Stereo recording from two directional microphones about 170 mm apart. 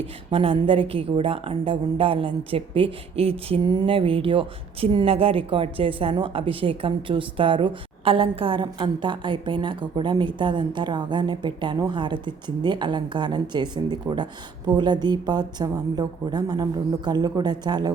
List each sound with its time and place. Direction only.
0.0 s a woman's voice: 30° right (ahead or behind)